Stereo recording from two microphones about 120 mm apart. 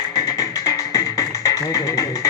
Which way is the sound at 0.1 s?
30° left (ahead or behind).